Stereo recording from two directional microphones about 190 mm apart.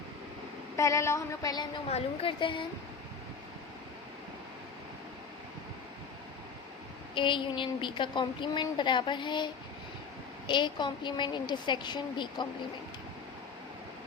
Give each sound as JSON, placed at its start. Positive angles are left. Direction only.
{"t": 0.8, "sound": "a woman's voice", "side_deg": 15}
{"t": 7.1, "sound": "a woman's voice", "side_deg": 25}